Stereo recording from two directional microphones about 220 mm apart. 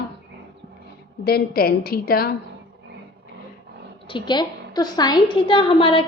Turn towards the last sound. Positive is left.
turn(degrees=25)  # may be behind; listen again after turning